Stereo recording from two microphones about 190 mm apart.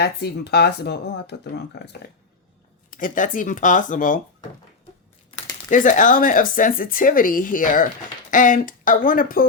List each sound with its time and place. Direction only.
0.0 s speech: 60° left (ahead or behind)
2.9 s speech: 45° left (ahead or behind)
5.7 s speech: 45° left (ahead or behind)